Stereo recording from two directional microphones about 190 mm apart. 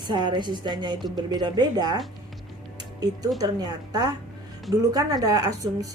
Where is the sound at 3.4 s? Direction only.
20° right (ahead or behind).